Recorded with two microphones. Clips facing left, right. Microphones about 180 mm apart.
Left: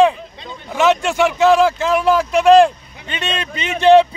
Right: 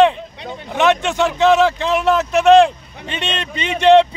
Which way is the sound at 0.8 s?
5° left (ahead or behind).